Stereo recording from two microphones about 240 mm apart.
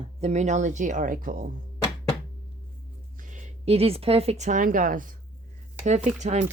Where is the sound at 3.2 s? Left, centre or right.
Right.